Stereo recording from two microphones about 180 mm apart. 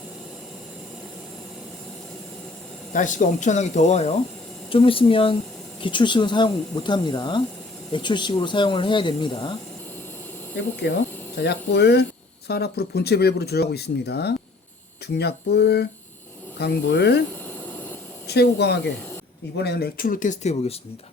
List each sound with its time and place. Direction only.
2.9 s speech: 45° left (ahead or behind); by 9.5 s 25° left (ahead or behind)
10.8 s speech: 65° left (ahead or behind)
18.3 s speech: 65° left (ahead or behind); by 20.7 s 40° left (ahead or behind)